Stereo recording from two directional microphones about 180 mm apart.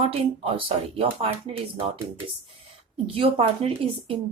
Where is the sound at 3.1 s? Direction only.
30° right (ahead or behind).